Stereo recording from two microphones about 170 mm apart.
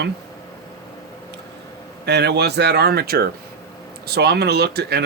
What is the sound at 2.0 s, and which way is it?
Speech, 80° right.